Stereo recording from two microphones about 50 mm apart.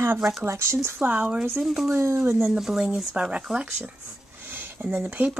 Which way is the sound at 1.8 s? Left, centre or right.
Right.